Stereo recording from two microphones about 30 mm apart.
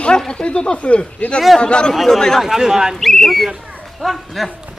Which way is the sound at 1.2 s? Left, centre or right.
Left.